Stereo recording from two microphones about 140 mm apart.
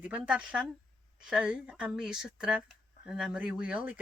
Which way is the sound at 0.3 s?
10° right (ahead or behind).